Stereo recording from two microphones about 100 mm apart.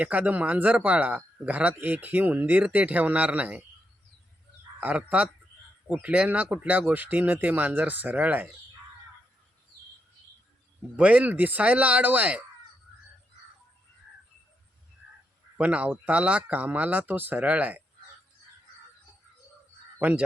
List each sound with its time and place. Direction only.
0.0 s a man's voice: 15° right (ahead or behind)
4.8 s a man's voice: 15° right (ahead or behind)
10.9 s a man's voice: 15° right (ahead or behind)
15.5 s a man's voice: 15° right (ahead or behind)
20.0 s speech: 15° right (ahead or behind)